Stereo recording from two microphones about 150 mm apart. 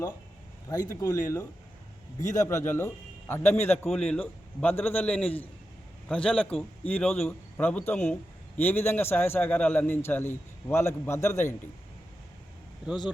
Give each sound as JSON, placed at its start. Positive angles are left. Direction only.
{"t": 0.7, "sound": "a man's voice", "side_deg": 25}
{"t": 3.8, "sound": "a man's voice", "side_deg": 5}